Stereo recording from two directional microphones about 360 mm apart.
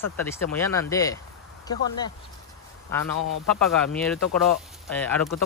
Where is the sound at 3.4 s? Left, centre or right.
Centre.